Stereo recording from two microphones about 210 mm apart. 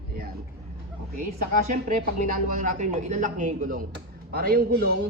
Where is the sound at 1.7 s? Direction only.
35° right (ahead or behind).